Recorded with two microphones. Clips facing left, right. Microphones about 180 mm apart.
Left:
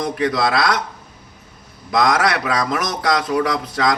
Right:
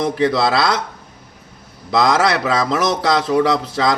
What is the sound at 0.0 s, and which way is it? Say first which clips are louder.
Speech: right 3 dB; 25° right (ahead or behind).